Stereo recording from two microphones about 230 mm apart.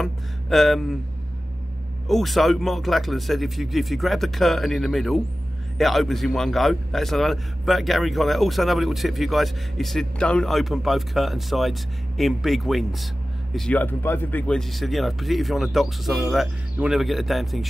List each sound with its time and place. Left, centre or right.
0.0 s a man's voice: centre
2.0 s a man's voice: centre